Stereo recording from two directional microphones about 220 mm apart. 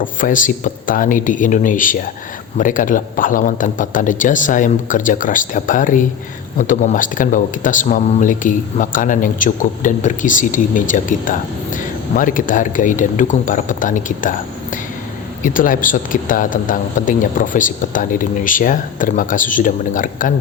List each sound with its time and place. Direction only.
0.0 s speech: 35° left (ahead or behind)
15.4 s speech: 40° left (ahead or behind)